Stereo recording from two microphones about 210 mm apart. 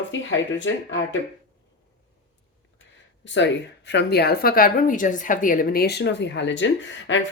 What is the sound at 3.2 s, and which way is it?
Speech, 60° left (ahead or behind).